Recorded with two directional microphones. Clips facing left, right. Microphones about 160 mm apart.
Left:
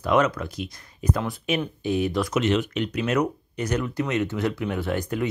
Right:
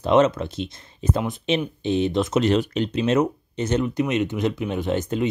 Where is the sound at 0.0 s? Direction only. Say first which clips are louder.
Right 4 dB; 25° right (ahead or behind).